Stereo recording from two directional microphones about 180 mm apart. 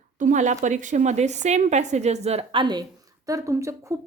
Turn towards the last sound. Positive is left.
turn(degrees=-15)  # may be behind; listen again after turning